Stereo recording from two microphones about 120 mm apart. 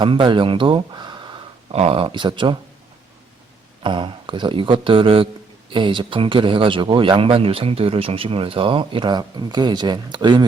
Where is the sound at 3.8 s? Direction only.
45° right (ahead or behind).